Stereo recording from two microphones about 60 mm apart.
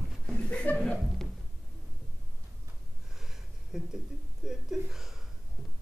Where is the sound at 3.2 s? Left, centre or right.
Centre.